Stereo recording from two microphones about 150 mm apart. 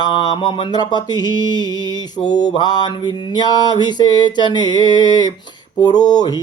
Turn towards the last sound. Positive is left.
turn(degrees=25)  # may be behind; listen again after turning